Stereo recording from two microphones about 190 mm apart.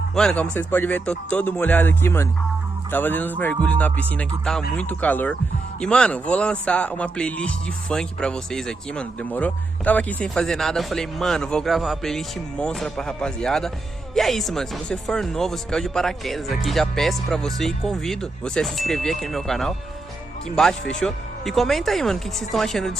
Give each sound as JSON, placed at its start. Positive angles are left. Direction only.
{"t": 0.2, "sound": "speech", "side_deg": 5}